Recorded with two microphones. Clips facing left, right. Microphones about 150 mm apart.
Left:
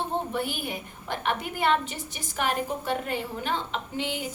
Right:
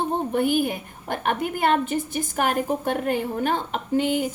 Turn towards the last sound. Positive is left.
turn(degrees=-45)  # may be behind; listen again after turning